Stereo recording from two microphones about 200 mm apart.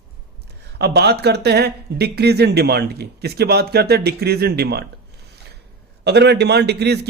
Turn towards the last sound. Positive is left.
turn(degrees=-55)  # may be behind; listen again after turning